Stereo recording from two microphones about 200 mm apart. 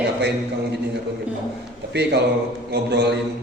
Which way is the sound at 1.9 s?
55° right (ahead or behind).